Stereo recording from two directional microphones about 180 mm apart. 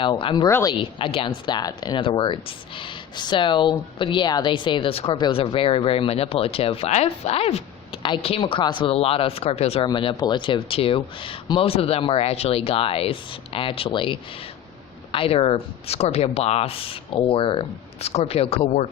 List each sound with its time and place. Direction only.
0.0 s a woman's voice: 30° left (ahead or behind)